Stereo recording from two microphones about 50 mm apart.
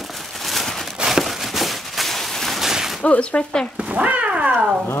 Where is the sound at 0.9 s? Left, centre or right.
Centre.